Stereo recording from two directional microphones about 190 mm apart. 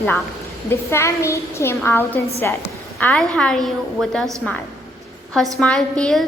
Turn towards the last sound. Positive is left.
turn(degrees=5)  # may be behind; listen again after turning